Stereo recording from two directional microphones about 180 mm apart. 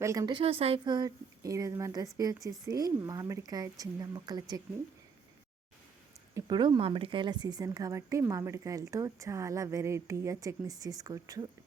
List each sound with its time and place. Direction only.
0.0 s a woman's voice: 15° right (ahead or behind)
6.3 s a woman's voice: 25° right (ahead or behind)